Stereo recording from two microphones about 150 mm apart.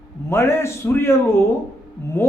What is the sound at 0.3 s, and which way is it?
A man's voice, 15° left (ahead or behind).